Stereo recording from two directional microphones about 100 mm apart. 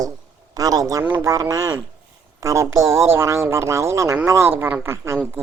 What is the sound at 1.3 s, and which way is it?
A woman's voice, 35° right (ahead or behind).